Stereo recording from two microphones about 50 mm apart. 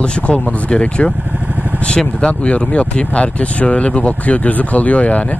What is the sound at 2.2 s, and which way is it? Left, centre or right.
Speech, left.